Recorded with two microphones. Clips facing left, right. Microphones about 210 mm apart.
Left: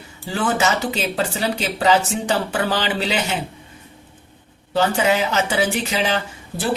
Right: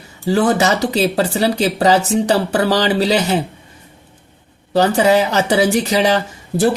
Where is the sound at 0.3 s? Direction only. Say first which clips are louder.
Right 6 dB; 40° right (ahead or behind).